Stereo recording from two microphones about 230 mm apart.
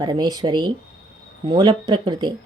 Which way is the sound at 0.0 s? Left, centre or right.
Centre.